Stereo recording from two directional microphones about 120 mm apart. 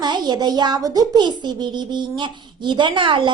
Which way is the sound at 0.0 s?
35° right (ahead or behind).